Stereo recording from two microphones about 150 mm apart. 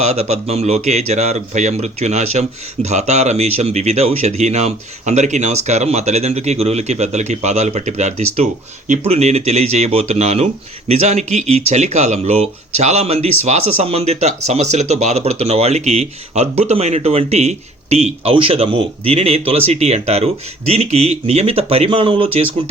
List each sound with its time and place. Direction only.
0.0 s speech: 45° right (ahead or behind)